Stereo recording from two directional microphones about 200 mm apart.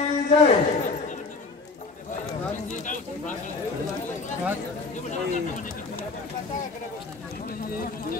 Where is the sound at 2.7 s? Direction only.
40° left (ahead or behind).